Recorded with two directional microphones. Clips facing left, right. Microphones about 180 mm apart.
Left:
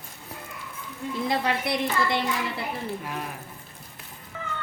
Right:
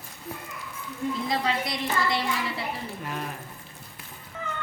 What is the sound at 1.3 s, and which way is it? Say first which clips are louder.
A woman's voice: left 5 dB; 60° left (ahead or behind).